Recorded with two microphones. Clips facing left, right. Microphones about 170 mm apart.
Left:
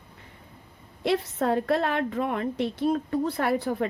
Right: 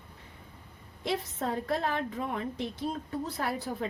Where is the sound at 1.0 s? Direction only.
70° left (ahead or behind).